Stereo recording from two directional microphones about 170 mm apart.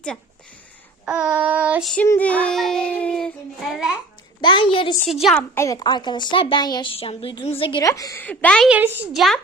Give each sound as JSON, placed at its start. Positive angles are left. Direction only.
{"t": 1.0, "sound": "child singing", "side_deg": -5}
{"t": 2.0, "sound": "a child's voice", "side_deg": 10}
{"t": 4.4, "sound": "a woman's voice", "side_deg": 30}
{"t": 5.2, "sound": "a child's voice", "side_deg": 5}
{"t": 5.5, "sound": "a woman's voice", "side_deg": 20}
{"t": 7.8, "sound": "a woman's voice", "side_deg": 20}
{"t": 8.7, "sound": "child singing", "side_deg": -10}
{"t": 9.1, "sound": "a child's voice", "side_deg": 0}